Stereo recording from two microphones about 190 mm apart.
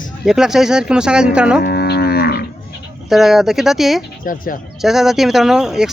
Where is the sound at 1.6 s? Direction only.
55° left (ahead or behind).